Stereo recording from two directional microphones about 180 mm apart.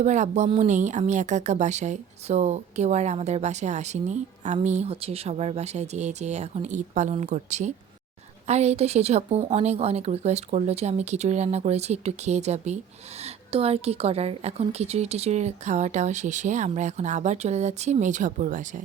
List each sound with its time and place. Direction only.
0.0 s speech: 40° right (ahead or behind)